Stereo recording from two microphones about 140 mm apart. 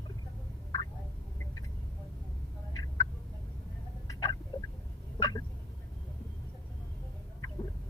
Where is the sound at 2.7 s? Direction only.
25° left (ahead or behind).